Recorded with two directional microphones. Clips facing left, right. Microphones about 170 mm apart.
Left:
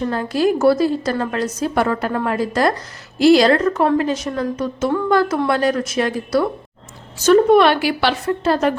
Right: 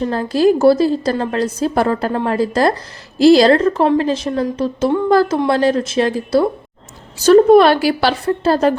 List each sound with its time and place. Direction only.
0.0 s speech: 30° right (ahead or behind)